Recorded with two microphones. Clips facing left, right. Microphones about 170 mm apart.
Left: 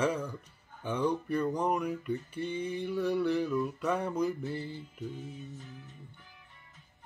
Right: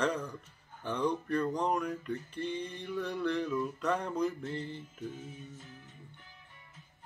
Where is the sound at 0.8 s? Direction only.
10° left (ahead or behind).